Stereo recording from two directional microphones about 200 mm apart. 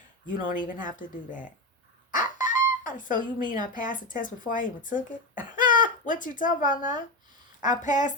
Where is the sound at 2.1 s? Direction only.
40° left (ahead or behind).